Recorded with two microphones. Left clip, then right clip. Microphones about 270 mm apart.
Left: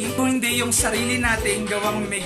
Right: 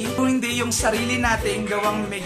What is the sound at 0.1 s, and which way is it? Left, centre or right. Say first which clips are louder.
Music: left 1 dB; centre.